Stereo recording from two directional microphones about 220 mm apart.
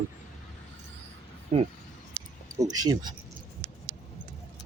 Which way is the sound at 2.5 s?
15° right (ahead or behind).